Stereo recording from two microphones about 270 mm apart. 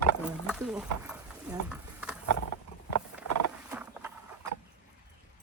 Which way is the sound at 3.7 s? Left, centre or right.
Centre.